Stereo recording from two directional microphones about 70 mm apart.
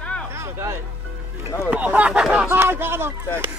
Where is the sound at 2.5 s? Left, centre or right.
Right.